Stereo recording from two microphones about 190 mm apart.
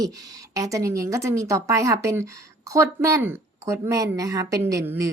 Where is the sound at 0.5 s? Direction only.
15° right (ahead or behind).